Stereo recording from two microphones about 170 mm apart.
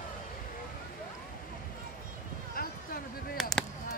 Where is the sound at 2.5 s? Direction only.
60° left (ahead or behind).